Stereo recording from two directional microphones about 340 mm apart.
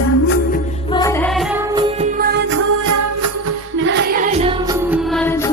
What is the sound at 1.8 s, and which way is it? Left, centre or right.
Music, right.